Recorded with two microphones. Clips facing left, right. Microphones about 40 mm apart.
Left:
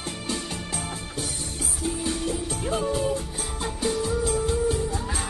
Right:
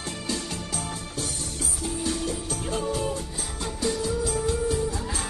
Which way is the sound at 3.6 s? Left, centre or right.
Left.